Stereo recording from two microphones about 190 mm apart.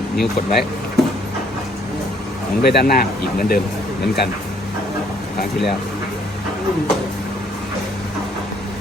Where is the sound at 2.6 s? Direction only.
55° left (ahead or behind).